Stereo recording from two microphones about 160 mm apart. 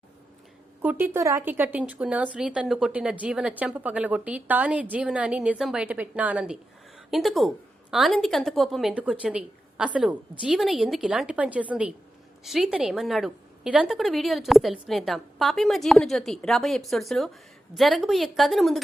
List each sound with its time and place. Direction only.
0.8 s a woman's voice: 10° right (ahead or behind)